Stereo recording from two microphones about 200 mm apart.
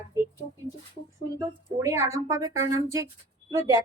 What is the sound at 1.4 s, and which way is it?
Speech, 15° right (ahead or behind).